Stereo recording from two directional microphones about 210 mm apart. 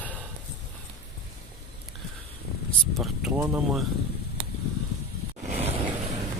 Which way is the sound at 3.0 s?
5° right (ahead or behind).